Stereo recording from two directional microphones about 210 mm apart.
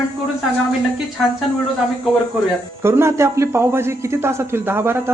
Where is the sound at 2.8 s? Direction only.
10° right (ahead or behind).